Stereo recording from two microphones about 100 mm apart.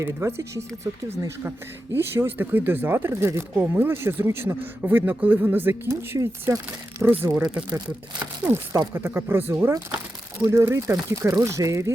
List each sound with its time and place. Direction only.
0.0 s speech: 25° right (ahead or behind)
1.5 s speech: 25° right (ahead or behind)
8.4 s speech: 30° right (ahead or behind)
9.7 s a sound: 25° right (ahead or behind)
10.4 s speech: 30° right (ahead or behind)